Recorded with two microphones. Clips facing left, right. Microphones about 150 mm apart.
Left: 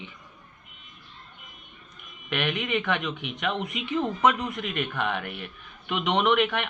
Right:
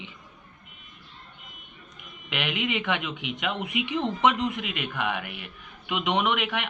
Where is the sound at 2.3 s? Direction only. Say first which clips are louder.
Left 1 dB; 15° right (ahead or behind).